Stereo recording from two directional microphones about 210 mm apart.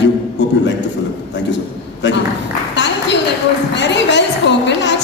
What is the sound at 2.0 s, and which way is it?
Speech, 55° left (ahead or behind).